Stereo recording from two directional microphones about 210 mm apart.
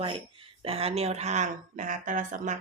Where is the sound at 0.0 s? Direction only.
25° right (ahead or behind).